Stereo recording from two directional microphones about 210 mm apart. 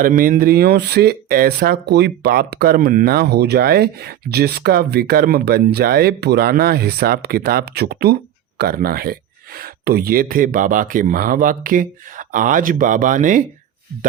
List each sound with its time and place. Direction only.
0.0 s speech: 40° right (ahead or behind)